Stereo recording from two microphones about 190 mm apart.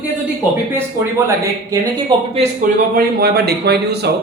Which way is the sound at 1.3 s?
20° right (ahead or behind).